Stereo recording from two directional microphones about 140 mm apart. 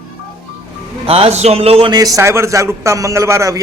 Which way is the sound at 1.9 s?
25° right (ahead or behind).